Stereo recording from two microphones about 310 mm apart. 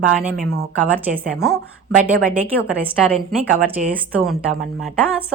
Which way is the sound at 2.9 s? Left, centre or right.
Centre.